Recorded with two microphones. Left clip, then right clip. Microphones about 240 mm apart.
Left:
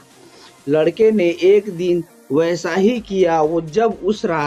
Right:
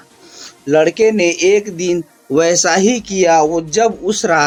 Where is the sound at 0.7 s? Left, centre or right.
Centre.